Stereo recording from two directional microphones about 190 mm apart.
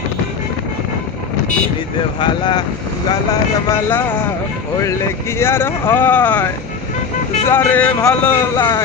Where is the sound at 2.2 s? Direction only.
25° left (ahead or behind).